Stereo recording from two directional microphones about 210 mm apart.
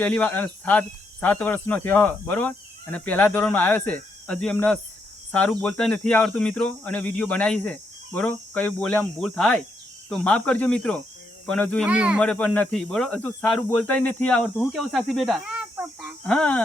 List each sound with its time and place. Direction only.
0.0 s speech: 5° left (ahead or behind)
11.9 s speech: 5° right (ahead or behind)
12.2 s speech: 5° left (ahead or behind)